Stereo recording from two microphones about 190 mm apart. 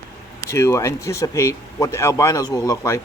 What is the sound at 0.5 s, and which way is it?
Speech, 15° left (ahead or behind).